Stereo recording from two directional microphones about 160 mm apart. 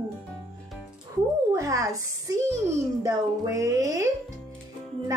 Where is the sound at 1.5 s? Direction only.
20° right (ahead or behind).